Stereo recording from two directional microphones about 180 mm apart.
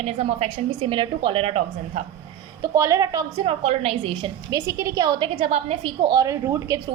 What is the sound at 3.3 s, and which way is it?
Speech, 35° right (ahead or behind).